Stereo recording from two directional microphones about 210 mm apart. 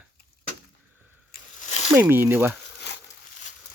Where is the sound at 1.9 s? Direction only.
10° right (ahead or behind).